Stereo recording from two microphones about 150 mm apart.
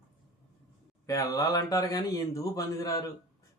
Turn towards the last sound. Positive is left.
turn(degrees=20)  # may be behind; listen again after turning